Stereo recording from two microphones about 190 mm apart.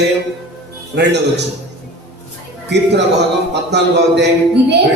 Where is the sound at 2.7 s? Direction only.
65° right (ahead or behind).